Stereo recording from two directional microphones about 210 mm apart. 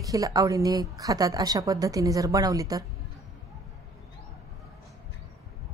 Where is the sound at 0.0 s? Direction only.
15° right (ahead or behind).